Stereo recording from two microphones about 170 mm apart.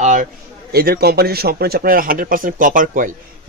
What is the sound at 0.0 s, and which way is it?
A man's voice, 50° right (ahead or behind).